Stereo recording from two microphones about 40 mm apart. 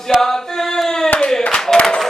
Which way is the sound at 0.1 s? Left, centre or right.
Centre.